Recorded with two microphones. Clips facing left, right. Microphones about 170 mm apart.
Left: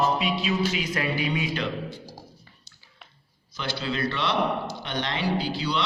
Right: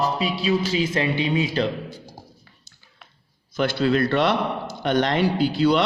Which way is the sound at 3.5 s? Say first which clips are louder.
Right 10 dB; 50° right (ahead or behind).